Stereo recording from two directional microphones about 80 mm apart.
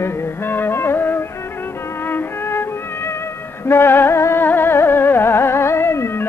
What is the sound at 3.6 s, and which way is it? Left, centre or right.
Music, left.